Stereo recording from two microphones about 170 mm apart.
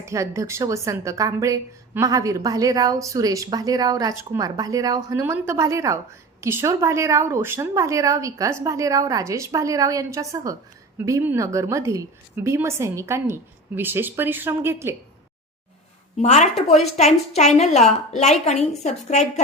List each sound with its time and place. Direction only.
0.0 s a woman's voice: 15° right (ahead or behind)
16.2 s a woman's voice: 40° left (ahead or behind)